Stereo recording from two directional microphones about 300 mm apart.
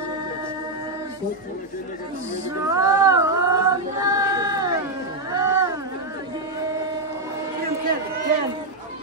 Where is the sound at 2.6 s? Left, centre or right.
Centre.